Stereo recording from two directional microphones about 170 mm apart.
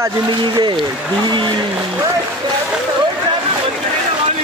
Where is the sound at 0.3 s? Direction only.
25° right (ahead or behind).